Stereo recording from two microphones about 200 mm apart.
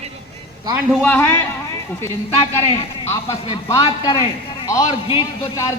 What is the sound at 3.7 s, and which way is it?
Speech, 25° left (ahead or behind).